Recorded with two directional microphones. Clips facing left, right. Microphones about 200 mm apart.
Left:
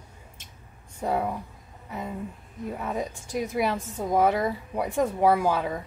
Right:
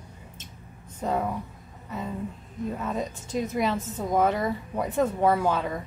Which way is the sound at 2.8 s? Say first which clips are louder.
Even; 15° left (ahead or behind).